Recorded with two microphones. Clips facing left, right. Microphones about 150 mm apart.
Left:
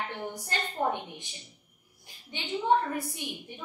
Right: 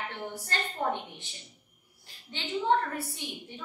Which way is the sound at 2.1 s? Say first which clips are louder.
Left 1 dB; 15° left (ahead or behind).